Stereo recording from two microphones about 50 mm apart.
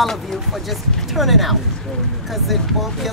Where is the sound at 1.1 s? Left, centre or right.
Centre.